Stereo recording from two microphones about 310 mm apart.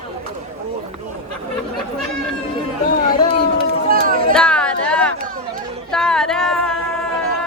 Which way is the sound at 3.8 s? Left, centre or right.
Right.